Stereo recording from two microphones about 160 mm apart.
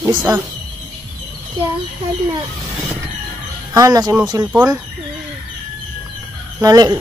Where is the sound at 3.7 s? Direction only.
20° right (ahead or behind).